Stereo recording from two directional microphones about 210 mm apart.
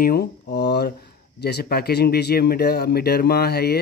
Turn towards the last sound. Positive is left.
turn(degrees=50)  # may be behind; listen again after turning